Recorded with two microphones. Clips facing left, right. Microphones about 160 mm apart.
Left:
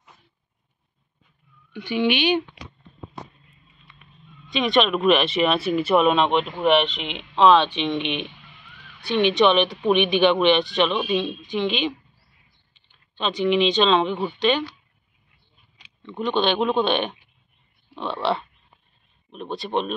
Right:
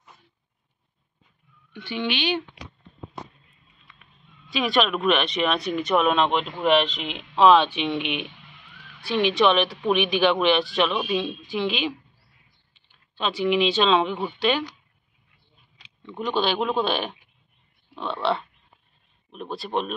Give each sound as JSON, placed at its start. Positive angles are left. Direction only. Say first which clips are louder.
{"t": 1.7, "sound": "speech", "louder": "left 6 dB", "side_deg": 10}
{"t": 3.8, "sound": "speech", "louder": "left 4 dB", "side_deg": 0}
{"t": 16.2, "sound": "speech", "louder": "left 3 dB", "side_deg": -5}